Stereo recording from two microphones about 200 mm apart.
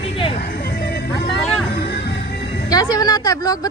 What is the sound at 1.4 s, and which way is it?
Music, 5° left (ahead or behind).